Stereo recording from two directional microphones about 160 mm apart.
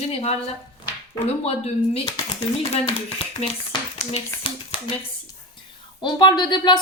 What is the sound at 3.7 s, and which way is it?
Speech, 35° left (ahead or behind).